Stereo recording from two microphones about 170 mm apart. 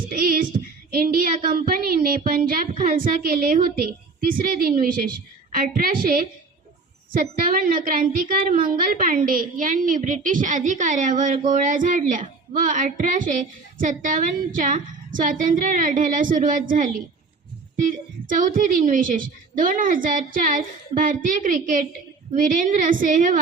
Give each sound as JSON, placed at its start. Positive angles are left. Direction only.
{"t": 0.1, "sound": "child singing", "side_deg": -55}
{"t": 0.9, "sound": "a woman's voice", "side_deg": -60}